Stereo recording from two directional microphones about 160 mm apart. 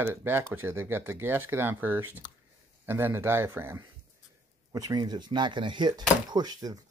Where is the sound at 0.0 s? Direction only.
15° right (ahead or behind).